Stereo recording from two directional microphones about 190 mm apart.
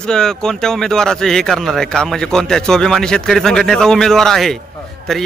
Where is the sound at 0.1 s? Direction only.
5° left (ahead or behind).